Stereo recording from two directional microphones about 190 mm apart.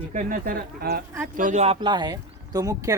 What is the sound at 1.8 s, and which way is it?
Speech, 25° right (ahead or behind).